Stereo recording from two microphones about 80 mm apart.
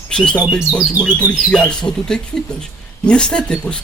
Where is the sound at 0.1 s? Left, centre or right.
Centre.